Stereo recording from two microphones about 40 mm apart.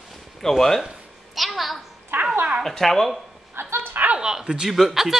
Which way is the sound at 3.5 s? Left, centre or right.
Right.